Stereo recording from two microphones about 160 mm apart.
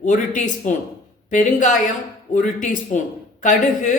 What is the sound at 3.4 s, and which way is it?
Speech, 50° left (ahead or behind).